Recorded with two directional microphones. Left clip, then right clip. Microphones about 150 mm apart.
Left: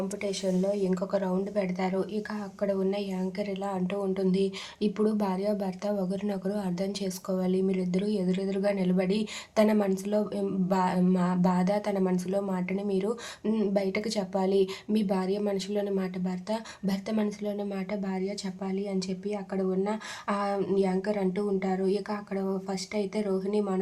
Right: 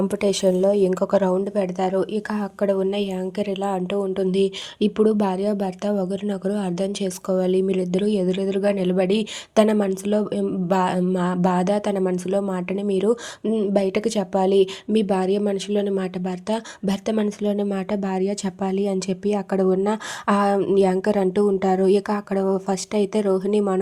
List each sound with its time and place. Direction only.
0.1 s speech: 65° right (ahead or behind); by 13.1 s 40° right (ahead or behind)
13.4 s speech: 25° right (ahead or behind)
13.7 s a woman's voice: 45° right (ahead or behind)